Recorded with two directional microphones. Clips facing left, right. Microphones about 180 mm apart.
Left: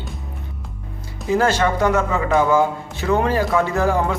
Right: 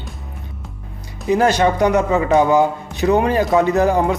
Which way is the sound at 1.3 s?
20° right (ahead or behind).